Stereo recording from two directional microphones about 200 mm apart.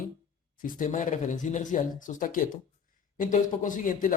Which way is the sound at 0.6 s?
40° left (ahead or behind).